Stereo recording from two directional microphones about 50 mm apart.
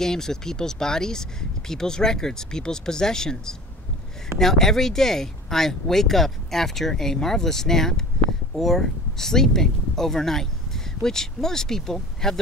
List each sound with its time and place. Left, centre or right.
0.0 s speech: centre